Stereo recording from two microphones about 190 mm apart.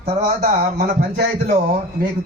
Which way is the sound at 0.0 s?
50° right (ahead or behind).